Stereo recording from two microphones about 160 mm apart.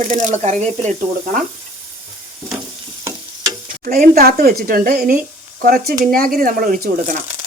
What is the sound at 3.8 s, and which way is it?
Speech, 65° right (ahead or behind).